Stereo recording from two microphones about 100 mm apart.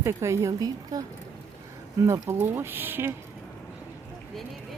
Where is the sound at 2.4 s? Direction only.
25° right (ahead or behind).